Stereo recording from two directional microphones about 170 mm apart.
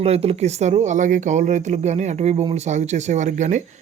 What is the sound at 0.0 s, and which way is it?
Speech, 35° right (ahead or behind).